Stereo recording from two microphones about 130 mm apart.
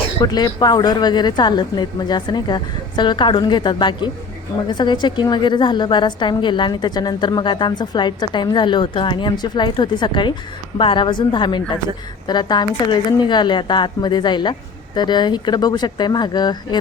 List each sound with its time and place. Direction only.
0.2 s a woman's voice: 30° left (ahead or behind)